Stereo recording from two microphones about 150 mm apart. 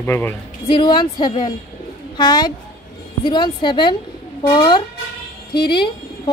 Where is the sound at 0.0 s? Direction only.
15° left (ahead or behind).